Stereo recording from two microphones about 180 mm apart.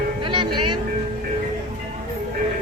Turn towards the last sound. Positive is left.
turn(degrees=-25)  # may be behind; listen again after turning